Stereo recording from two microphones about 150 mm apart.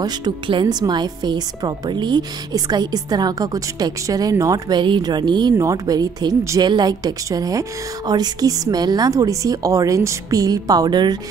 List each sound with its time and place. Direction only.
0.0 s a woman's voice: 30° right (ahead or behind)